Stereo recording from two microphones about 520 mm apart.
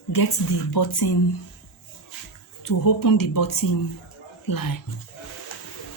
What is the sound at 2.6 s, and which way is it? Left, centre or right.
Speech, left.